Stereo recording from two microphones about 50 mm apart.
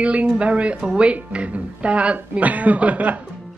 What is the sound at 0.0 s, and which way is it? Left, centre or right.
Speech, right.